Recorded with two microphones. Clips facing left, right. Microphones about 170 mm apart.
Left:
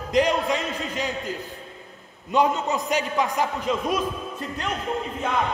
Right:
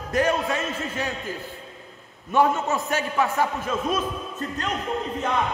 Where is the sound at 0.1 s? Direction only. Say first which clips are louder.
Left 2 dB; 15° left (ahead or behind).